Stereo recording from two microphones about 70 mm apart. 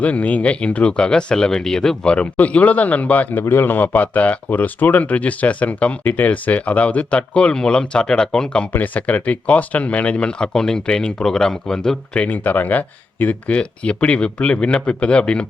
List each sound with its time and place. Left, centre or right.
0.0 s speech: left